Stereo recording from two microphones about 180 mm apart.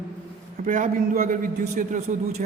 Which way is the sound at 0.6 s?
45° right (ahead or behind).